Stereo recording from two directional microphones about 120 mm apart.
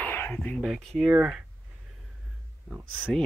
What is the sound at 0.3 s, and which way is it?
Speech, 10° left (ahead or behind).